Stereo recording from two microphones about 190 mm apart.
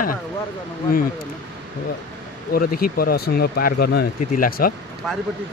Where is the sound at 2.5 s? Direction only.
50° left (ahead or behind).